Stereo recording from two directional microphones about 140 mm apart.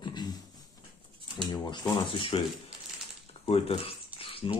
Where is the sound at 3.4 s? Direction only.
45° left (ahead or behind).